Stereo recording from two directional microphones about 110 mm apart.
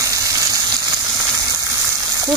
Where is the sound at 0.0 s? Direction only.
30° right (ahead or behind).